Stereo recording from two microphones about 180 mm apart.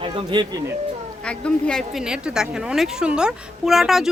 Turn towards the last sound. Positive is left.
turn(degrees=0)  # may be behind; listen again after turning